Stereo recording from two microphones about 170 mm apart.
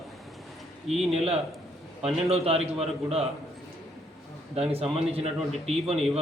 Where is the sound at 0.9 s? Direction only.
35° right (ahead or behind).